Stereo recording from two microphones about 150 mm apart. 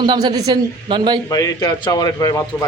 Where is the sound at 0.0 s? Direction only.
30° right (ahead or behind).